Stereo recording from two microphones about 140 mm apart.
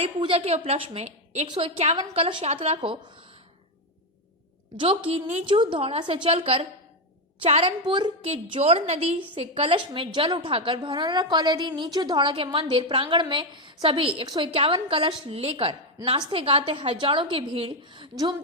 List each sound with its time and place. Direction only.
0.0 s a woman's voice: 40° right (ahead or behind)
4.8 s a woman's voice: 40° right (ahead or behind)
5.5 s a woman's voice: 35° right (ahead or behind)